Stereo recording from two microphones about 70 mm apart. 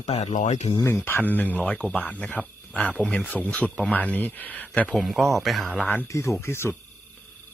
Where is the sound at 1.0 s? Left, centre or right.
Left.